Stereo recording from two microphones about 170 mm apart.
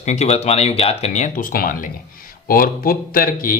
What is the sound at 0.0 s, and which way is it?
Speech, 40° left (ahead or behind).